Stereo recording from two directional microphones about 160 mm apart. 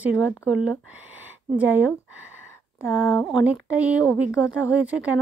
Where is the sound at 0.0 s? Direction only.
10° right (ahead or behind).